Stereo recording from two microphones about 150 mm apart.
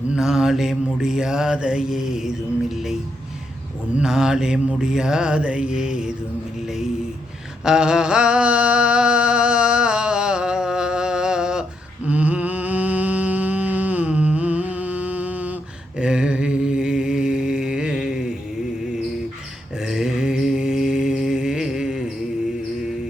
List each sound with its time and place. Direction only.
0.1 s mantra: 5° right (ahead or behind)
3.9 s mantra: 5° right (ahead or behind)
7.6 s a sound: 5° right (ahead or behind)
12.0 s humming: 10° right (ahead or behind)
16.0 s mantra: 5° right (ahead or behind)
19.8 s mantra: 5° right (ahead or behind)